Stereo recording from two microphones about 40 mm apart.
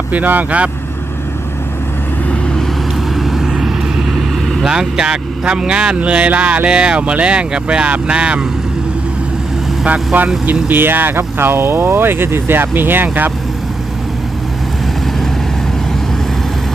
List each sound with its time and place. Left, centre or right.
0.1 s speech: right
3.2 s vehicle: centre
4.6 s speech: centre
6.0 s speech: right
10.4 s speech: right